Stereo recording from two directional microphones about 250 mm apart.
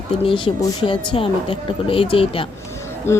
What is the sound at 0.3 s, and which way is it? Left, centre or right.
Speech, centre.